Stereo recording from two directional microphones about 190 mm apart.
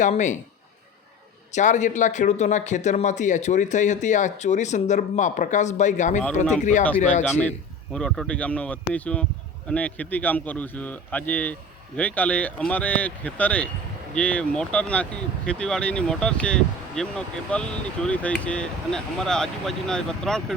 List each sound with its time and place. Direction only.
0.0 s speech: 40° left (ahead or behind)
1.5 s speech: 40° left (ahead or behind)
7.9 s a man's voice: centre (ahead or behind)